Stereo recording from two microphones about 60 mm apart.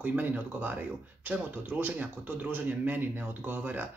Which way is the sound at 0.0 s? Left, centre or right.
Right.